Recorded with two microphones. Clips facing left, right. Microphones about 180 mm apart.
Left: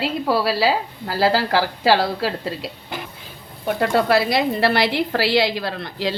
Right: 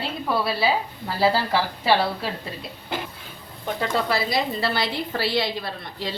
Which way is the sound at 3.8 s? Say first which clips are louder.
Left 7 dB; 70° left (ahead or behind).